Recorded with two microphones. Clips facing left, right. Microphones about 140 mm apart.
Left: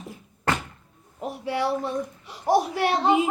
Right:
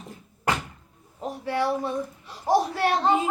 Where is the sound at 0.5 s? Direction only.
15° right (ahead or behind).